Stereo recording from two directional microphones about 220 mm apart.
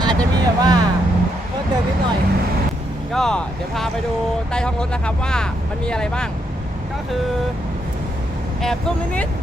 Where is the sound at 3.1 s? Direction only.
Centre (ahead or behind).